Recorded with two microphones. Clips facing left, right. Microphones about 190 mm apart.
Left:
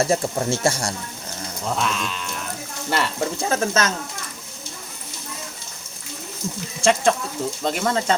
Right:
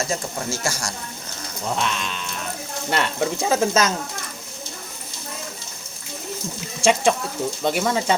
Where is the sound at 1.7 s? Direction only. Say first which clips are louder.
Left 1 dB; centre (ahead or behind).